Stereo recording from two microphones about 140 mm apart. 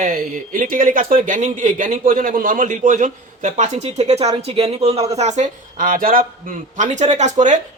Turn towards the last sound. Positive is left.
turn(degrees=-60)  # may be behind; listen again after turning